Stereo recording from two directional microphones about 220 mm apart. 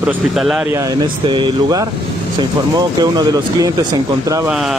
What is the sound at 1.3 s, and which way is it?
Speech, 20° right (ahead or behind).